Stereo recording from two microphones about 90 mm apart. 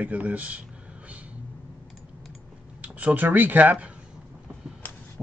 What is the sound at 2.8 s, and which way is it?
Speech, 15° right (ahead or behind).